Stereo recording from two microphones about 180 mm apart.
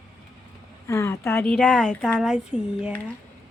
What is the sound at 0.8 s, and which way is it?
Speech, 15° left (ahead or behind).